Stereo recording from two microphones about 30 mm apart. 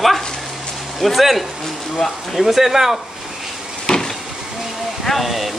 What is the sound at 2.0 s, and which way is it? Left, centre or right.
Speech, centre.